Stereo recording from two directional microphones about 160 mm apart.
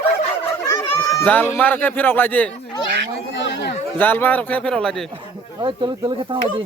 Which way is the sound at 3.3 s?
90° left.